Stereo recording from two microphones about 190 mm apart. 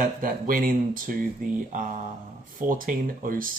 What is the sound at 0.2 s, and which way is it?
Speech, 45° right (ahead or behind).